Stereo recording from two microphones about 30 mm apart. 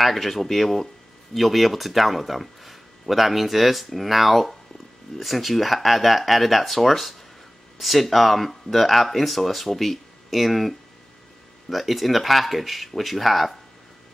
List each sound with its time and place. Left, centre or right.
0.0 s speech: centre